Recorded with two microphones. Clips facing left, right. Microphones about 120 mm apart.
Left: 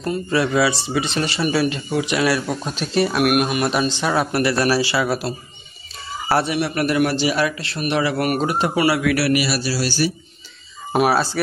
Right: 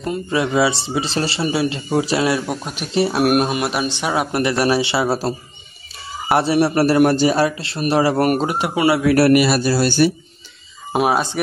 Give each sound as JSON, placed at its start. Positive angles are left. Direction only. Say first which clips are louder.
{"t": 0.0, "sound": "speech", "louder": "even", "side_deg": -20}
{"t": 2.9, "sound": "speech", "louder": "right 2 dB", "side_deg": -25}
{"t": 3.6, "sound": "speech", "louder": "left 1 dB", "side_deg": -10}
{"t": 6.4, "sound": "a man's voice", "louder": "right 6 dB", "side_deg": -35}
{"t": 8.5, "sound": "speech", "louder": "right 1 dB", "side_deg": -15}
{"t": 9.0, "sound": "speech", "louder": "right 6 dB", "side_deg": -45}
{"t": 10.9, "sound": "speech", "louder": "even", "side_deg": -15}